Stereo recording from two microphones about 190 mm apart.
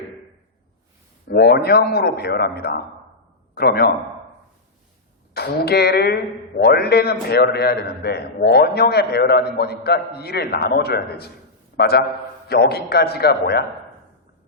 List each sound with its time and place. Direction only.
1.3 s a man's voice: 55° left (ahead or behind)
5.3 s a woman's voice: 55° left (ahead or behind)